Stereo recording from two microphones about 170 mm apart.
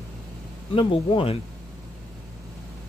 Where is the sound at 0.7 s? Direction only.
30° left (ahead or behind).